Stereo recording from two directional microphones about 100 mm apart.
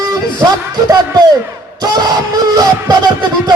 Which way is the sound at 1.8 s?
40° right (ahead or behind).